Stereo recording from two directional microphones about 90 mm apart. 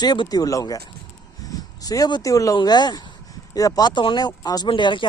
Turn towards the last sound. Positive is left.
turn(degrees=60)  # may be behind; listen again after turning